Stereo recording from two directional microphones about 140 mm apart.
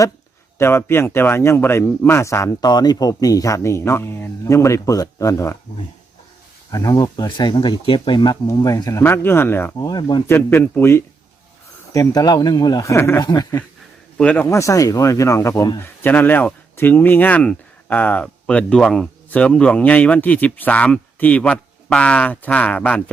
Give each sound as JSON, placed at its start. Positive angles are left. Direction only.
{"t": 0.6, "sound": "a man's voice", "side_deg": 15}
{"t": 6.7, "sound": "a man's voice", "side_deg": 25}
{"t": 9.7, "sound": "speech", "side_deg": 30}
{"t": 10.2, "sound": "a man's voice", "side_deg": 15}
{"t": 14.2, "sound": "speech", "side_deg": 10}
{"t": 14.4, "sound": "a man's voice", "side_deg": 20}